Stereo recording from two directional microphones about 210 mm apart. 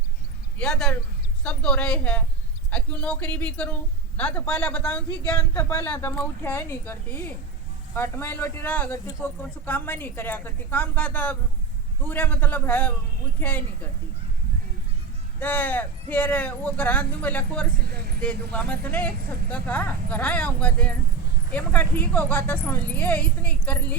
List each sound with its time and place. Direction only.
0.6 s speech: 5° left (ahead or behind)
15.4 s speech: 10° left (ahead or behind)
17.8 s speech: 50° right (ahead or behind)
18.2 s speech: 5° left (ahead or behind)